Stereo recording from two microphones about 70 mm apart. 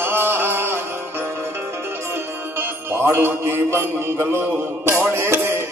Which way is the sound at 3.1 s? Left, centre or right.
Right.